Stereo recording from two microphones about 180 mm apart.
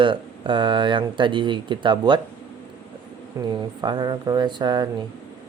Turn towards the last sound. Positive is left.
turn(degrees=-25)  # may be behind; listen again after turning